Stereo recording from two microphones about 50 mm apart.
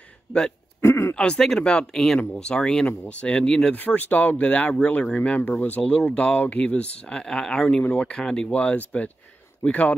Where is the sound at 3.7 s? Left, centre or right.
Left; by 7.7 s centre.